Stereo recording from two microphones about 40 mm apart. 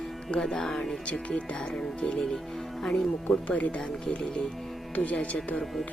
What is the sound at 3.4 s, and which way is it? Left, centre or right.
Music, left.